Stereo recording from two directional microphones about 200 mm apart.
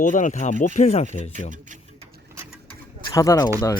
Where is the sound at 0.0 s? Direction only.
40° left (ahead or behind).